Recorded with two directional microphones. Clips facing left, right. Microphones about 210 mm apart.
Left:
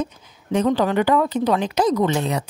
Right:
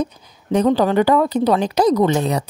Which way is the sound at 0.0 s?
35° right (ahead or behind).